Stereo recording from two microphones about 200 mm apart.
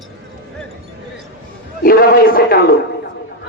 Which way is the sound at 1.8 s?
50° left (ahead or behind).